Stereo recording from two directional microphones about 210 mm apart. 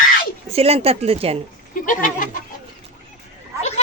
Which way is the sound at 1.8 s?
40° left (ahead or behind).